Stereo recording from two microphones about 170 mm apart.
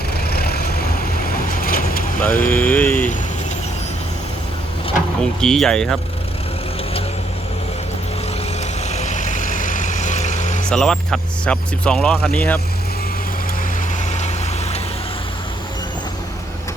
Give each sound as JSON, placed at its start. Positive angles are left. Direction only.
{"t": 0.3, "sound": "vehicle", "side_deg": 65}
{"t": 2.5, "sound": "a sound", "side_deg": 10}
{"t": 5.2, "sound": "speech", "side_deg": 5}
{"t": 8.9, "sound": "vehicle", "side_deg": 45}
{"t": 10.7, "sound": "speech", "side_deg": 5}